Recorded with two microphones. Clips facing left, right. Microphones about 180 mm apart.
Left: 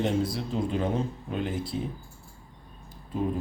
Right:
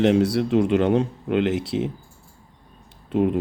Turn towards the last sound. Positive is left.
turn(degrees=-70)  # may be behind; listen again after turning